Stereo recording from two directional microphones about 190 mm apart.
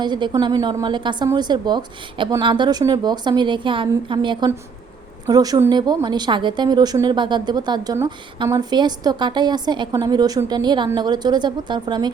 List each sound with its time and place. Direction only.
0.0 s a woman's voice: 25° right (ahead or behind)